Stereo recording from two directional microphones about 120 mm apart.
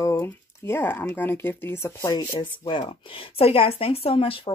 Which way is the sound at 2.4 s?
40° left (ahead or behind).